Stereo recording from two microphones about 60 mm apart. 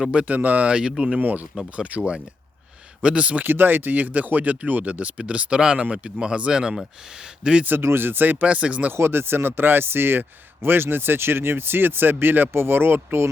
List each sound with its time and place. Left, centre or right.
0.0 s speech: centre
1.2 s speech: right
3.4 s speech: right; by 7.6 s centre
7.8 s speech: right
8.9 s speech: right